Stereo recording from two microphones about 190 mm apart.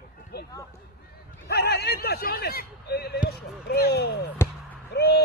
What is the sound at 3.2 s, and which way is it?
Basketball bounce, 55° left (ahead or behind).